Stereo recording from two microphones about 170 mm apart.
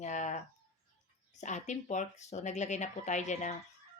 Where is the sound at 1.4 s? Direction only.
45° left (ahead or behind).